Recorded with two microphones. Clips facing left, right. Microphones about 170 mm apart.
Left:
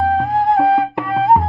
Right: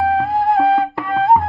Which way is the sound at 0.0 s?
5° right (ahead or behind).